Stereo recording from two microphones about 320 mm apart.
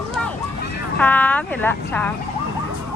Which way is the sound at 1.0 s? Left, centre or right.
Centre.